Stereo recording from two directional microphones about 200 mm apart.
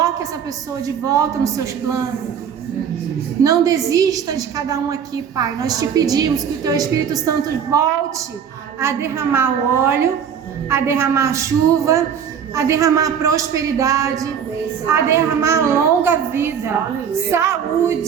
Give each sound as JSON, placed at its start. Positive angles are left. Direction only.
{"t": 0.8, "sound": "a woman's voice", "side_deg": -15}
{"t": 3.4, "sound": "a woman's voice", "side_deg": -15}